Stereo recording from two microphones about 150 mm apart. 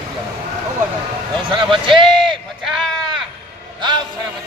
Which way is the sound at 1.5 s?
35° right (ahead or behind).